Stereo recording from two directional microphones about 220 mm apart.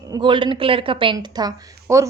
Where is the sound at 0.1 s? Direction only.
20° right (ahead or behind).